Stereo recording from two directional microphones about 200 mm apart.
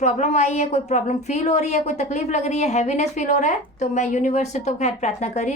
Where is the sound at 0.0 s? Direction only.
35° left (ahead or behind).